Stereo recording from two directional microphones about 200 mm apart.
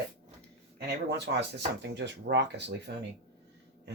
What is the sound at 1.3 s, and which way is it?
Speech, 60° right (ahead or behind).